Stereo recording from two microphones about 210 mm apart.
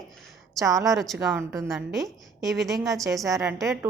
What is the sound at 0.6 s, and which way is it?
Speech, 15° right (ahead or behind).